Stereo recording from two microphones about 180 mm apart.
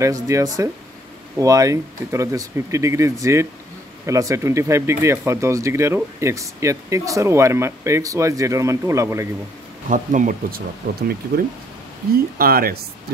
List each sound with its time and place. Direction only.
0.0 s speech: 15° right (ahead or behind)
9.8 s speech: 45° right (ahead or behind)